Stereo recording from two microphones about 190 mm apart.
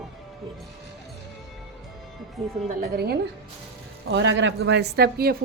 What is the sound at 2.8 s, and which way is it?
Speech, 55° right (ahead or behind).